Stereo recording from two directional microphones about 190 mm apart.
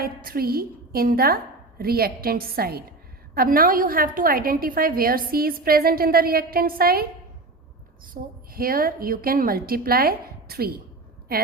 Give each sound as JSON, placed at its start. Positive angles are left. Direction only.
{"t": 0.0, "sound": "a woman's voice", "side_deg": -50}